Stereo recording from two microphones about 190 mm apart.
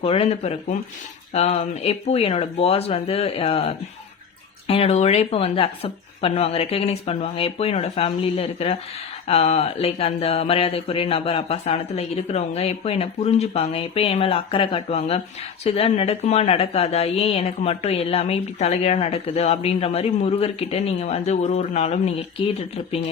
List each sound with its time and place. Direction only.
0.0 s a woman's voice: 30° left (ahead or behind)